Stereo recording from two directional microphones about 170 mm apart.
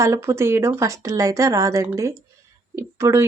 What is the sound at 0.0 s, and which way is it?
A woman's voice, 15° right (ahead or behind).